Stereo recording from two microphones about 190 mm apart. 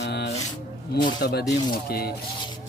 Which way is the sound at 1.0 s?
60° left (ahead or behind).